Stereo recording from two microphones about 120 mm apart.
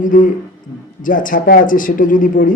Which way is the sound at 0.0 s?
90° left.